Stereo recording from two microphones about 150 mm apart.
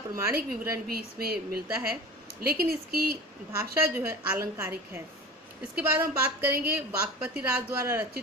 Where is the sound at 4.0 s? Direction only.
15° right (ahead or behind).